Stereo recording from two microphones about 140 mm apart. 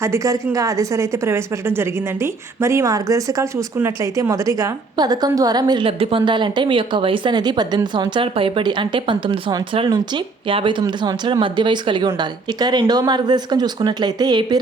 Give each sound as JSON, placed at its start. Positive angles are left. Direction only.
{"t": 0.0, "sound": "a woman's voice", "side_deg": -20}